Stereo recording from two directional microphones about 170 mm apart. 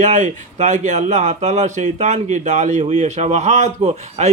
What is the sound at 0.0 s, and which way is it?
Speech, 45° right (ahead or behind).